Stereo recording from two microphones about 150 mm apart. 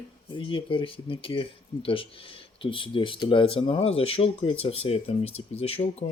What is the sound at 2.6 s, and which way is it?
Speech, 35° left (ahead or behind).